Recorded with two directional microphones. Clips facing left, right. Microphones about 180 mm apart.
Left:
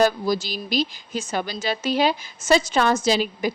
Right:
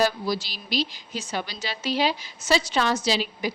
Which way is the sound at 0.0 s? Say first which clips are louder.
Left 4 dB; 45° left (ahead or behind).